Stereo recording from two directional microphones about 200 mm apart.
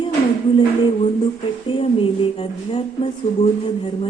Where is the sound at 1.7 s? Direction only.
25° left (ahead or behind).